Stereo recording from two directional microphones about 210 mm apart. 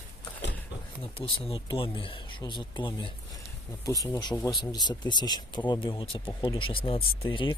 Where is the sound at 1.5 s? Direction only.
25° left (ahead or behind).